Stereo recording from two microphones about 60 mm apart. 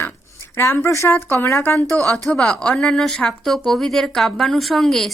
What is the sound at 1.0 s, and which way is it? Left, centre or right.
Speech, left.